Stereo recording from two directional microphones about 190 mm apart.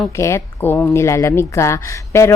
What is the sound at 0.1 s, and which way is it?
Speech, 15° left (ahead or behind).